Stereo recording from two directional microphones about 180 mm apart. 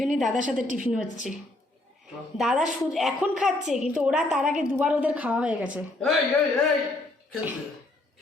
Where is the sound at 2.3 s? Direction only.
Centre (ahead or behind).